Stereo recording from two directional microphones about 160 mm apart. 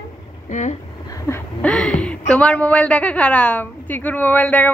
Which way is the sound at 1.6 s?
5° left (ahead or behind).